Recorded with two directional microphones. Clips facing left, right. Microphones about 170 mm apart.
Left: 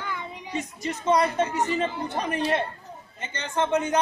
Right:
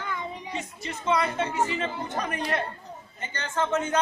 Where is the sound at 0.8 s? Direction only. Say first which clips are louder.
Left 3 dB; 40° left (ahead or behind); by 4.0 s 15° left (ahead or behind).